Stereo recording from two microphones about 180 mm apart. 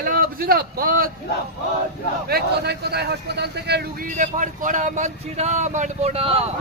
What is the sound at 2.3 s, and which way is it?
A man's voice, 65° right (ahead or behind).